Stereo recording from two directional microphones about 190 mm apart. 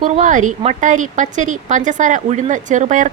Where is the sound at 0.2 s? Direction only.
40° right (ahead or behind).